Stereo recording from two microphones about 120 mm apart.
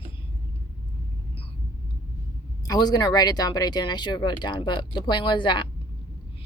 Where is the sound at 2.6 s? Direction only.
35° left (ahead or behind).